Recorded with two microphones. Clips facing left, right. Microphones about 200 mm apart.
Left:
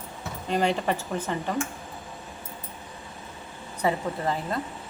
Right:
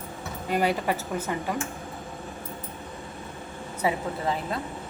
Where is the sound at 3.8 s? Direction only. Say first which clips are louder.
Left 1 dB; 5° right (ahead or behind).